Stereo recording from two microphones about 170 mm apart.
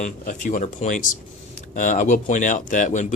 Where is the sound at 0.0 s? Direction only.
50° left (ahead or behind).